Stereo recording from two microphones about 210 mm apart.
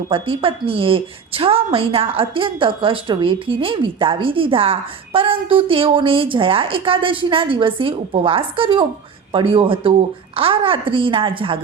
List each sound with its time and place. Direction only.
0.1 s a woman's voice: 25° right (ahead or behind)